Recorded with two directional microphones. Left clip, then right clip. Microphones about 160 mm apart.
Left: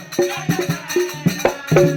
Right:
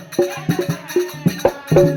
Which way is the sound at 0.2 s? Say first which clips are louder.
Right 1 dB; 35° right (ahead or behind).